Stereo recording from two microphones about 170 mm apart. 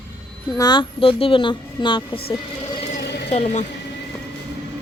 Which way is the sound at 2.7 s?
70° left (ahead or behind).